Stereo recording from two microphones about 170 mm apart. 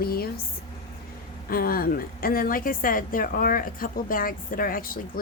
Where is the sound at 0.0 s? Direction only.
65° left (ahead or behind).